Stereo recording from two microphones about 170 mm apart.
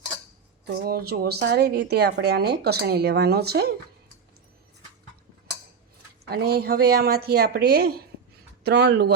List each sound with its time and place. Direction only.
0.7 s a woman's voice: 65° right (ahead or behind)
6.2 s a woman's voice: 65° right (ahead or behind)